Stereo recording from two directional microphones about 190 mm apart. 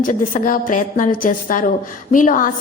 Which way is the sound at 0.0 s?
45° left (ahead or behind).